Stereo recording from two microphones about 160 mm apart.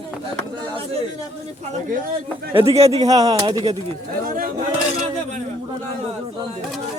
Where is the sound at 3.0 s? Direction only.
20° right (ahead or behind).